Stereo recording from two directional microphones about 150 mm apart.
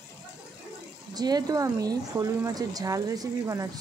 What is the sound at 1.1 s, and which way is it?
Speech, 25° right (ahead or behind).